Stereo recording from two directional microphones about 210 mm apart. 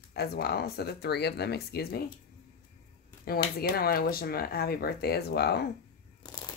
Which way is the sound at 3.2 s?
45° left (ahead or behind).